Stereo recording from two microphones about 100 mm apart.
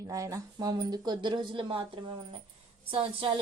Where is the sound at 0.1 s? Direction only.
35° right (ahead or behind).